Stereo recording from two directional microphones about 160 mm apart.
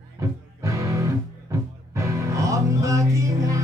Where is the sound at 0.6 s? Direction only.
20° right (ahead or behind).